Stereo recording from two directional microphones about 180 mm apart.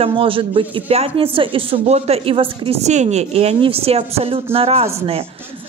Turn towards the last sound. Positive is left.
turn(degrees=-35)  # may be behind; listen again after turning